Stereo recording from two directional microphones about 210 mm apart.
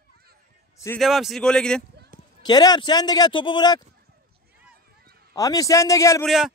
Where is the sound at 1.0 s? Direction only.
Centre (ahead or behind).